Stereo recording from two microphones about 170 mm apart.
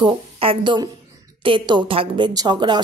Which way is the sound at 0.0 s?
30° right (ahead or behind).